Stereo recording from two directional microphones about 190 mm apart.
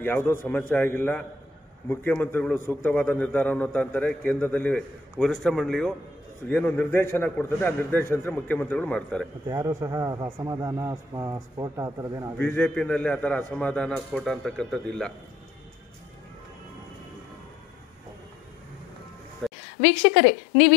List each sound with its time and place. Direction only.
0.0 s a man's voice: 10° left (ahead or behind)
9.5 s a man's voice: 15° right (ahead or behind)
12.4 s a man's voice: 10° left (ahead or behind)
19.4 s a sound: centre (ahead or behind)